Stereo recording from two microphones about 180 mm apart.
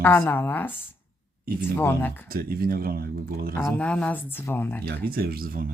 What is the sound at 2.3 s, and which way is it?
Speech, 55° right (ahead or behind).